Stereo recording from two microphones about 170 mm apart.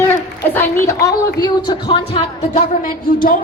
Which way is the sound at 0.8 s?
20° left (ahead or behind).